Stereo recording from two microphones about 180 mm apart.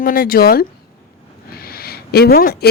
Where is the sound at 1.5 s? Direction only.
60° left (ahead or behind).